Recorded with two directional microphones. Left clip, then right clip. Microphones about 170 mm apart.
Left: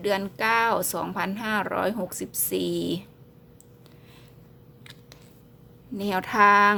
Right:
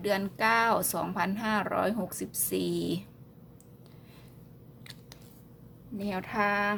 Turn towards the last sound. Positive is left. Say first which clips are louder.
# left 11 dB
turn(degrees=30)  # may be behind; listen again after turning